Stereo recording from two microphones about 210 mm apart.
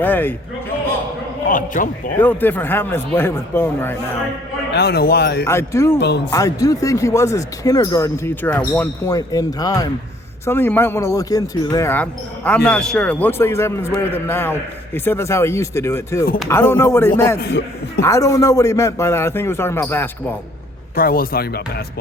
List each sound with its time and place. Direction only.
0.0 s a man's voice: 10° left (ahead or behind)
1.5 s a man's voice: 40° left (ahead or behind)
2.1 s a man's voice: 10° left (ahead or behind)
4.7 s speech: 50° left (ahead or behind)
5.5 s a man's voice: 15° left (ahead or behind)
6.0 s speech: 55° left (ahead or behind)
6.3 s a man's voice: 15° left (ahead or behind)
17.4 s a man's voice: 55° left (ahead or behind)
18.0 s a man's voice: 15° left (ahead or behind)
20.9 s speech: 45° left (ahead or behind)